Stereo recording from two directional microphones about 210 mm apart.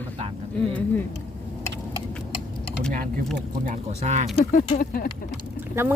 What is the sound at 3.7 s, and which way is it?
Speech, 35° right (ahead or behind).